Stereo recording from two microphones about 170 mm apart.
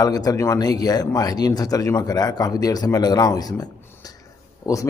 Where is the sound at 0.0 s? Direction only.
20° left (ahead or behind).